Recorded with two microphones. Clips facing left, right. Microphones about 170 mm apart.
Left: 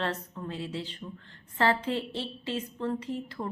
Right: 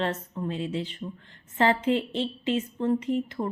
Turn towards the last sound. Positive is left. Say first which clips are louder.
# right 7 dB
turn(degrees=-15)  # may be behind; listen again after turning